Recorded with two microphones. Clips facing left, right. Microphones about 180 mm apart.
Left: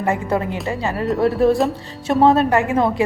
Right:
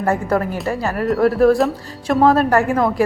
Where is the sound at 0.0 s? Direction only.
20° left (ahead or behind).